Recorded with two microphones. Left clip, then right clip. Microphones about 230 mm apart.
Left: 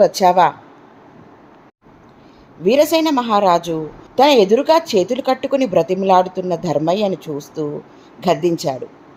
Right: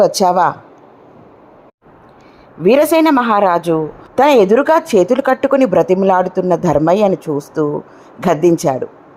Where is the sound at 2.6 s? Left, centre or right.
Centre.